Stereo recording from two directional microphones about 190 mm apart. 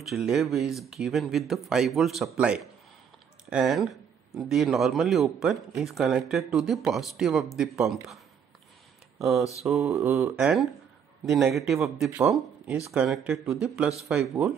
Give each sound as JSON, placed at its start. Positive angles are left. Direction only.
{"t": 0.0, "sound": "speech", "side_deg": 0}
{"t": 9.7, "sound": "speech", "side_deg": 0}